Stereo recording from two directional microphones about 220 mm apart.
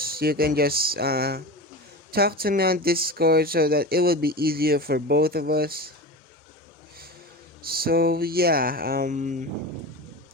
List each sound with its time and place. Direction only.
0.0 s speech: 45° right (ahead or behind)
7.6 s speech: 45° right (ahead or behind)